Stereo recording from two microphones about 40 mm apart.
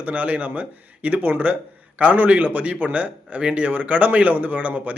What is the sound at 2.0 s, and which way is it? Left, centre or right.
A man's voice, right.